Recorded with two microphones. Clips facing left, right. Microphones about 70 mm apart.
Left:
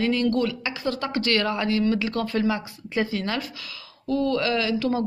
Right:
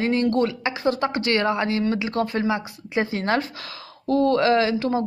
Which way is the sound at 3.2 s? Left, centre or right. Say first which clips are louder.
Right 6 dB; right.